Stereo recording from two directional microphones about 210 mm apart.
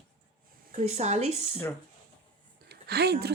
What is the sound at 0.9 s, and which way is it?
Speech, 30° right (ahead or behind).